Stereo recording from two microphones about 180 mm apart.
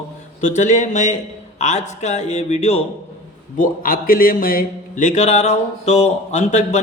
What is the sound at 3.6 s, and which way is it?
A man's voice, 50° left (ahead or behind).